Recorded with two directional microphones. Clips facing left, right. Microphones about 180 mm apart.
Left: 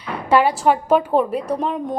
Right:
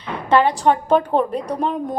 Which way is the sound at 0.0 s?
10° left (ahead or behind).